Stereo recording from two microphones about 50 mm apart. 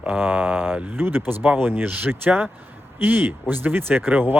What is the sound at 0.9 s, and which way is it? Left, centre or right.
Speech, right.